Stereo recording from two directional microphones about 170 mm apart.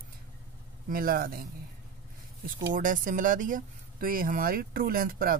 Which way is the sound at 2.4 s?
55° right (ahead or behind).